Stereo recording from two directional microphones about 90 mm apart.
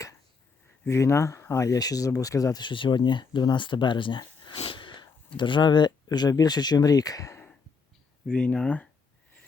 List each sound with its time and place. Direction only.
0.9 s speech: 35° left (ahead or behind)
2.6 s speech: 65° left (ahead or behind); by 7.3 s 40° left (ahead or behind)
8.3 s speech: 15° left (ahead or behind)